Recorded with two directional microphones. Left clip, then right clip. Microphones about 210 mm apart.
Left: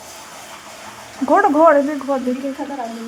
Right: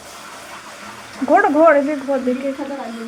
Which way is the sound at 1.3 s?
10° left (ahead or behind).